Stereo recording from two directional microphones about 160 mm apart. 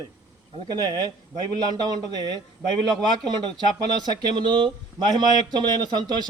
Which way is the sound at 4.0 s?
25° right (ahead or behind).